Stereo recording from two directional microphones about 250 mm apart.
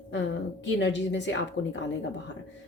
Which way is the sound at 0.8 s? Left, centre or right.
Left.